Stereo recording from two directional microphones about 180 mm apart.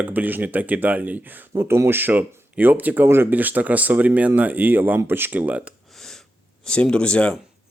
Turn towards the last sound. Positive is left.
turn(degrees=5)  # may be behind; listen again after turning